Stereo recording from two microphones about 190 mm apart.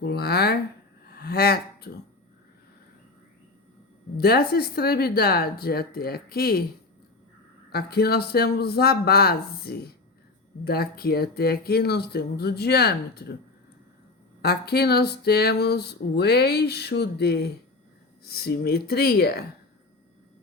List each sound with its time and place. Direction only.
0.0 s speech: 55° left (ahead or behind)
1.1 s a sound: 55° left (ahead or behind)
4.2 s speech: 55° left (ahead or behind)
7.7 s speech: 55° left (ahead or behind)
14.4 s speech: 55° left (ahead or behind)